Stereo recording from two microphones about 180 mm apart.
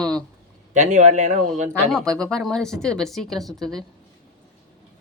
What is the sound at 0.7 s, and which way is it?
A man's voice, 40° right (ahead or behind).